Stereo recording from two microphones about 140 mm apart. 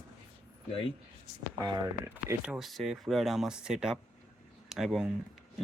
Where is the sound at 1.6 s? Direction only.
20° right (ahead or behind).